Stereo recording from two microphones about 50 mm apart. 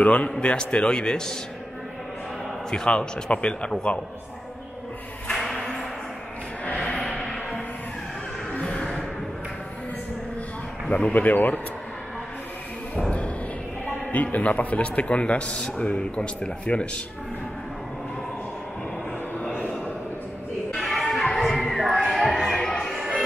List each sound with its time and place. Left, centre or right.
0.0 s a man's voice: left
2.7 s a man's voice: centre
5.3 s a sound: centre
8.5 s music: left
10.9 s speech: centre
11.1 s speech: left
14.1 s a man's voice: left
19.4 s vehicle: left
20.7 s music: centre
22.1 s a sound: centre
22.8 s music: centre